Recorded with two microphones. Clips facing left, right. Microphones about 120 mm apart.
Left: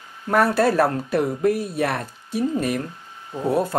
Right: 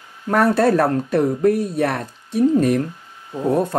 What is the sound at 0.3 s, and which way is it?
Speech, 5° left (ahead or behind).